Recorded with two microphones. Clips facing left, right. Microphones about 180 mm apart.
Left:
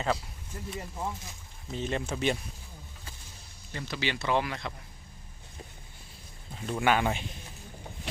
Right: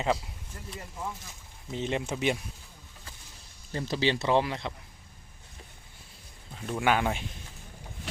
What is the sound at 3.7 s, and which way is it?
Speech, 35° right (ahead or behind).